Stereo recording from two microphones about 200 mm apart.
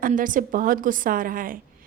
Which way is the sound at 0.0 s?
40° right (ahead or behind).